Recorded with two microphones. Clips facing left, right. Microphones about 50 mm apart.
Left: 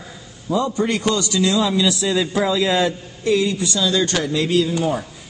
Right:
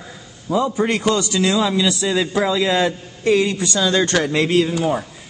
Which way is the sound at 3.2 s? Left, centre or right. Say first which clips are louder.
Right 2 dB; right.